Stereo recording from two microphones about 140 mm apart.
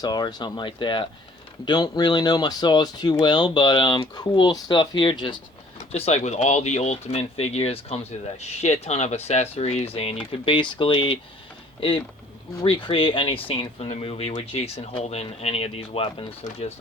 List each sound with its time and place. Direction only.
0.0 s speech: 30° left (ahead or behind)
5.9 s speech: 55° left (ahead or behind)